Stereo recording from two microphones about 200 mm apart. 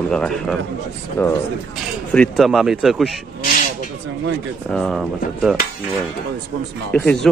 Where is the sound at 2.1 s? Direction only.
Centre (ahead or behind).